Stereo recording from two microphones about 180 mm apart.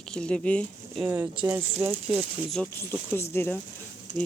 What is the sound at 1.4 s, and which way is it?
Speech, 15° right (ahead or behind).